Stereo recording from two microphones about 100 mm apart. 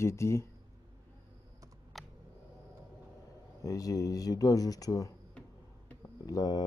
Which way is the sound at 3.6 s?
35° left (ahead or behind).